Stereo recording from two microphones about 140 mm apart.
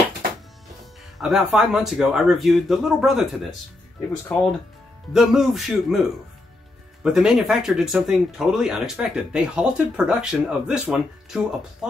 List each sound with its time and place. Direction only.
1.1 s speech: centre (ahead or behind)